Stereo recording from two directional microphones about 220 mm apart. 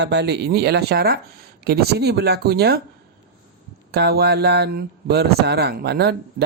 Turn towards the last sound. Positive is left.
turn(degrees=-50)  # may be behind; listen again after turning